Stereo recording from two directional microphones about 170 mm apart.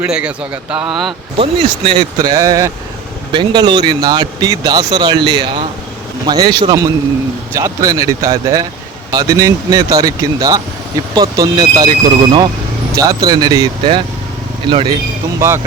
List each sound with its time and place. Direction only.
0.0 s speech: 5° right (ahead or behind)
1.4 s speech: 30° right (ahead or behind)
15.4 s speech: 15° right (ahead or behind)